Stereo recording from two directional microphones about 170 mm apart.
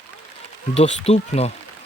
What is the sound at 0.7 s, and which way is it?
Speech, 40° left (ahead or behind).